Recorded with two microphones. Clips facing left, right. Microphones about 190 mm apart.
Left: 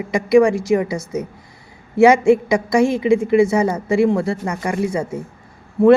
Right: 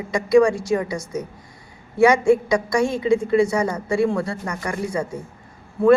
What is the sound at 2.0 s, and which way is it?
A woman's voice, 25° left (ahead or behind).